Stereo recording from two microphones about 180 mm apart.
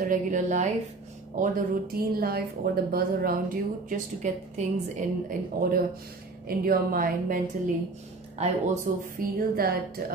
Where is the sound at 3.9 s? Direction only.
40° right (ahead or behind).